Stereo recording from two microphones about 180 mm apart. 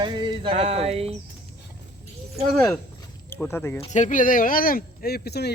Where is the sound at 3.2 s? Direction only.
10° left (ahead or behind).